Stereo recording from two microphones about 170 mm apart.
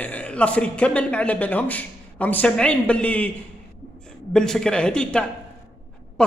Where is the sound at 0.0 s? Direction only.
10° left (ahead or behind).